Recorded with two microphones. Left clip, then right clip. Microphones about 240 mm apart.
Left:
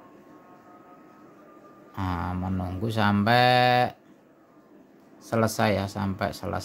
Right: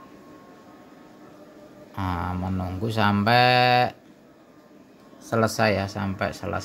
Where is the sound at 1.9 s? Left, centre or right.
Centre.